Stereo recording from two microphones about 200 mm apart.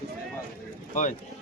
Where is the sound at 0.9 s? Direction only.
40° left (ahead or behind).